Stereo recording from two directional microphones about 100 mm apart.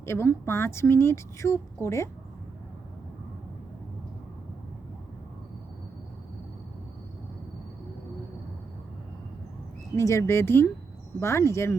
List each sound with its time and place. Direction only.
0.0 s speech: 25° left (ahead or behind)
9.9 s speech: 30° left (ahead or behind)